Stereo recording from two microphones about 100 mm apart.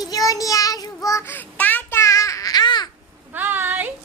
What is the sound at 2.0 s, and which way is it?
Babbling, 30° left (ahead or behind).